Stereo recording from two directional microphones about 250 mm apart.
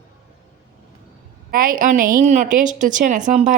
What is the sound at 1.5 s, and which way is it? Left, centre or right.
A woman's voice, right.